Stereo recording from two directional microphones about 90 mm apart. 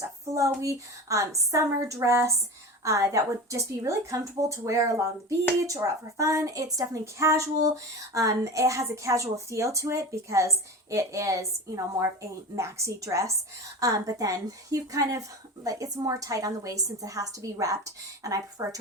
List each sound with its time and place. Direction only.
0.3 s a woman's voice: 35° right (ahead or behind)